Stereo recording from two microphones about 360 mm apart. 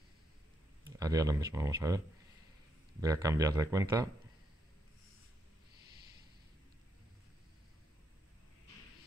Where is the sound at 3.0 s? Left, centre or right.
Centre.